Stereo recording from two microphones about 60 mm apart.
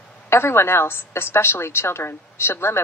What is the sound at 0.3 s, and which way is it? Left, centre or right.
A woman's voice, left.